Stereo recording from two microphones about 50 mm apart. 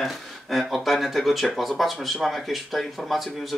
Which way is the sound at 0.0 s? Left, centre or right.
Centre.